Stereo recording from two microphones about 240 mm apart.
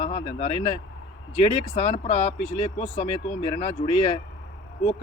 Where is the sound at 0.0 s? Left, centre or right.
Left.